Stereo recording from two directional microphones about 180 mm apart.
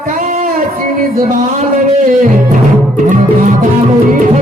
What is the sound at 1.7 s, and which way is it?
Speech, 45° right (ahead or behind).